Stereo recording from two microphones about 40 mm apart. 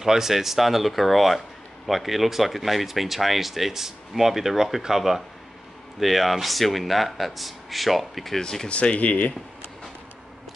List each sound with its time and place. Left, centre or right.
0.0 s speech: centre
8.4 s speech: centre
8.6 s speech: left